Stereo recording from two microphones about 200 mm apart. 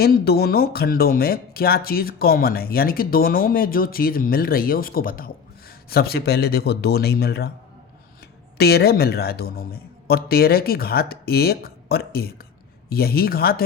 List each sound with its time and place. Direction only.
0.0 s speech: 50° left (ahead or behind)
8.5 s speech: 50° left (ahead or behind)